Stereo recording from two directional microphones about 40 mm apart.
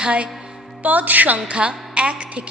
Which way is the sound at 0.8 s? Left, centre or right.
Right.